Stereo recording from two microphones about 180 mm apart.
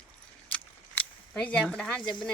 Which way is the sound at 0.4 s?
5° left (ahead or behind).